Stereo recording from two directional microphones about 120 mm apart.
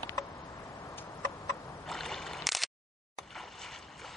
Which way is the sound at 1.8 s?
Centre (ahead or behind).